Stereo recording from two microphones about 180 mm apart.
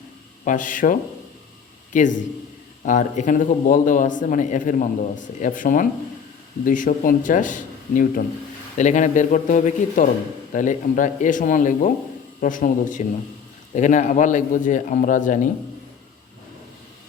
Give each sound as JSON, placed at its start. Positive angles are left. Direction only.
{"t": 0.4, "sound": "a man's voice", "side_deg": 45}
{"t": 1.9, "sound": "a man's voice", "side_deg": 45}